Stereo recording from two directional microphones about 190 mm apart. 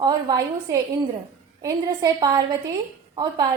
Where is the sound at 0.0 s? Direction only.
20° right (ahead or behind).